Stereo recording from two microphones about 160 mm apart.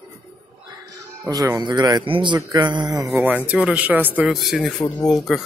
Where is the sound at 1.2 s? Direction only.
20° right (ahead or behind).